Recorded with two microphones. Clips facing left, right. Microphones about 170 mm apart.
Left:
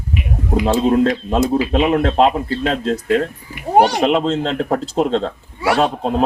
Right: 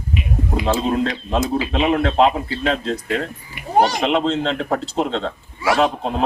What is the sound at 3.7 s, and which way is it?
Speech, 70° left (ahead or behind).